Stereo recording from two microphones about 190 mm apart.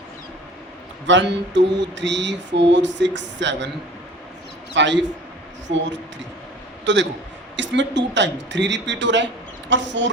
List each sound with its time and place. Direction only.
1.0 s mantra: 70° right (ahead or behind)
4.7 s a man's voice: 70° right (ahead or behind)
6.8 s a man's voice: 70° right (ahead or behind)
7.5 s mantra: 70° right (ahead or behind)